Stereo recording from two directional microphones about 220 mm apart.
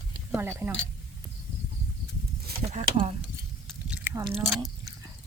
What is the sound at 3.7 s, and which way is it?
Biting, 5° right (ahead or behind).